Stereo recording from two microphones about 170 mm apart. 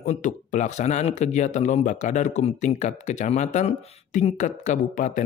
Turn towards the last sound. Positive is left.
turn(degrees=45)  # may be behind; listen again after turning